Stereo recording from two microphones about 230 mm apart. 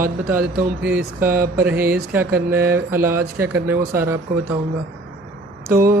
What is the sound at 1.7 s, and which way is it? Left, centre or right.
Speech, right.